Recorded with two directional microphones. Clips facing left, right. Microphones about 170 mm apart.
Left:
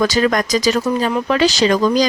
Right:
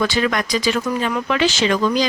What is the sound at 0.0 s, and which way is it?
Speech, 40° left (ahead or behind).